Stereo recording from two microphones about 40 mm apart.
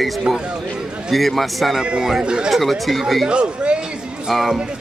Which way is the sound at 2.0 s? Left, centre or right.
Centre.